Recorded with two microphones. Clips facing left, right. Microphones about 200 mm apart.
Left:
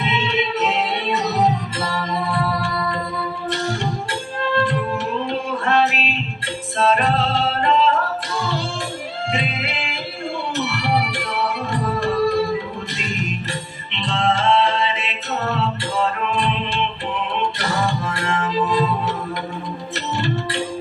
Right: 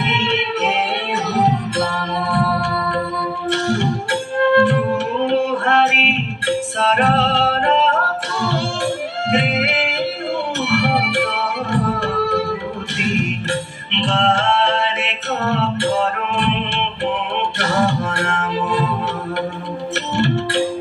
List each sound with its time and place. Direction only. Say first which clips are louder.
0.0 s music: right 1 dB; 70° right (ahead or behind)
2.3 s music: right 3 dB; 70° right (ahead or behind)
9.3 s music: right 8 dB; 65° right (ahead or behind)
11.7 s tabla: right 2 dB; 65° right (ahead or behind)
12.9 s music: right 8 dB; 65° right (ahead or behind)